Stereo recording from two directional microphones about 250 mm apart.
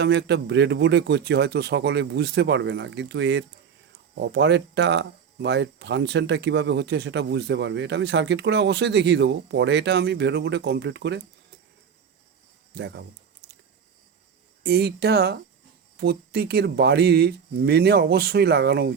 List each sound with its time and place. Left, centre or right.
0.0 s speech: right
14.6 s speech: right